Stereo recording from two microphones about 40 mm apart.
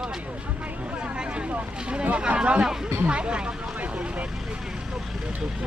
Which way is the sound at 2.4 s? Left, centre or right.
Right.